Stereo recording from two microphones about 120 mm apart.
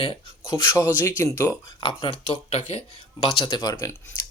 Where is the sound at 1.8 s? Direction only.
40° left (ahead or behind).